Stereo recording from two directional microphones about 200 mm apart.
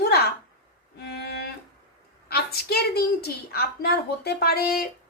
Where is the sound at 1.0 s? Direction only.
55° left (ahead or behind).